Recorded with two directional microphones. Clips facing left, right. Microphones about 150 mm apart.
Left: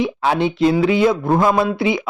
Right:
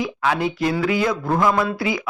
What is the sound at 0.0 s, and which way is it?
Speech, 25° left (ahead or behind).